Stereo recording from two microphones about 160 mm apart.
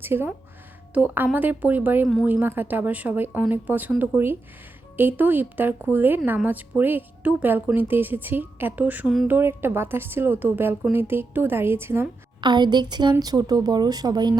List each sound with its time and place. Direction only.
0.0 s speech: 15° right (ahead or behind)
12.4 s speech: 30° right (ahead or behind)